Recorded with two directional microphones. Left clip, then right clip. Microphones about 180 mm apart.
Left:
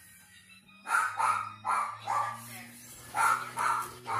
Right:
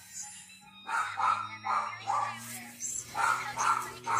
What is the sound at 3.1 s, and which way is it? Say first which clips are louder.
Music: left 3 dB; 55° left (ahead or behind).